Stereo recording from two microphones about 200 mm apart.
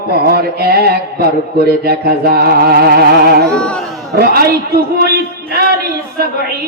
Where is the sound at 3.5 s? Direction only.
5° left (ahead or behind).